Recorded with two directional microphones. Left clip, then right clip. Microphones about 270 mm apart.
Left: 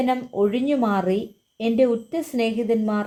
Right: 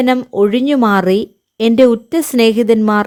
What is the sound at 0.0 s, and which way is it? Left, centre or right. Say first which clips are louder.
Speech: right 9 dB; right.